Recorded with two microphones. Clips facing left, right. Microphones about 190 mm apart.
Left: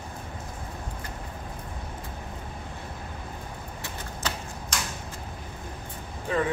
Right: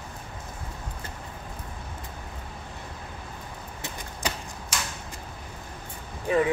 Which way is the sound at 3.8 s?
15° right (ahead or behind).